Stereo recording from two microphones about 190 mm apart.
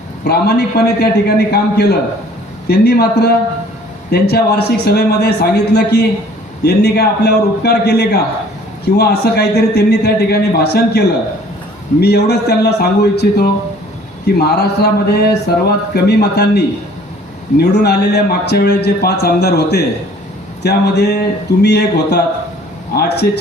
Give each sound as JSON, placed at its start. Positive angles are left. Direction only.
{"t": 0.3, "sound": "speech", "side_deg": 60}